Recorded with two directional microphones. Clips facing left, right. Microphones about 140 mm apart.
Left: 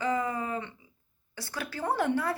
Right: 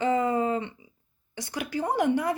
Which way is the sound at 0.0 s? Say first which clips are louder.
Right 6 dB; 25° right (ahead or behind).